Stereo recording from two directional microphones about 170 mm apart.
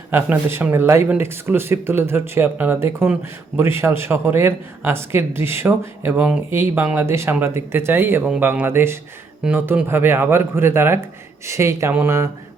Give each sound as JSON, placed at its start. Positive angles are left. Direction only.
{"t": 0.1, "sound": "speech", "side_deg": -10}